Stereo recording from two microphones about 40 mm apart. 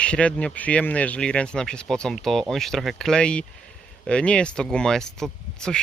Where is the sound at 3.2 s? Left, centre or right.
Left.